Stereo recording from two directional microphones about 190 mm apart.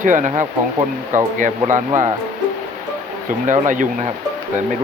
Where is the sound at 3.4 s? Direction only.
40° right (ahead or behind).